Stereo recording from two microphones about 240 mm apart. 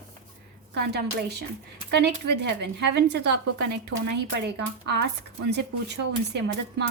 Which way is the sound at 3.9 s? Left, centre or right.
Right.